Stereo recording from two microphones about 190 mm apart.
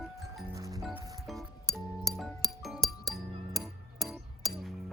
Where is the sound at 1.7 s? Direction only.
15° right (ahead or behind).